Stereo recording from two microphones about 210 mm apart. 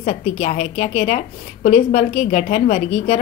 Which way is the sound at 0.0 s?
35° left (ahead or behind).